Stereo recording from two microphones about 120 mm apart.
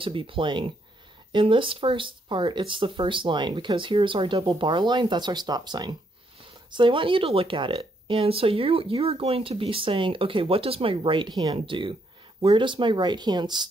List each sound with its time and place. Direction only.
0.0 s speech: 45° right (ahead or behind)